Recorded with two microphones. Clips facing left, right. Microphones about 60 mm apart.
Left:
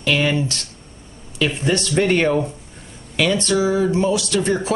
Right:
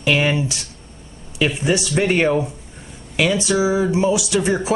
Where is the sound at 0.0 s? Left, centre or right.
Centre.